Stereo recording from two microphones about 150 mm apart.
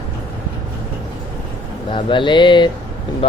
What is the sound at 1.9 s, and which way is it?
Speech, 35° left (ahead or behind).